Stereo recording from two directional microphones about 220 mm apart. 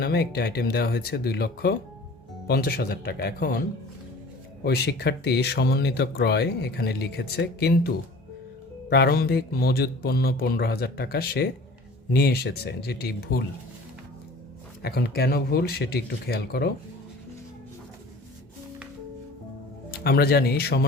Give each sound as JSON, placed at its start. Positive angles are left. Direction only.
{"t": 0.0, "sound": "speech", "side_deg": 45}
{"t": 4.6, "sound": "speech", "side_deg": 45}
{"t": 14.8, "sound": "speech", "side_deg": 45}
{"t": 20.1, "sound": "speech", "side_deg": 45}